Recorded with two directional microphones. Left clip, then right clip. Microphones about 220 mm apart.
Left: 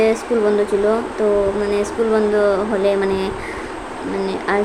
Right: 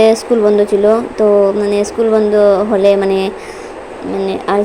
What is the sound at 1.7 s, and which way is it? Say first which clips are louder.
A woman's voice: right 5 dB; 20° right (ahead or behind).